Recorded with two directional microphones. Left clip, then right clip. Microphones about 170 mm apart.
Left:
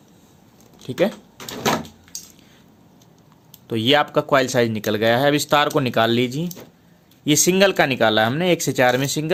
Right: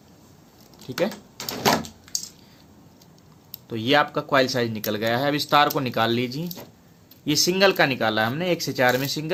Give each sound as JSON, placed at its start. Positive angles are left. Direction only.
{"t": 0.9, "sound": "speech", "side_deg": 40}
{"t": 3.7, "sound": "speech", "side_deg": 45}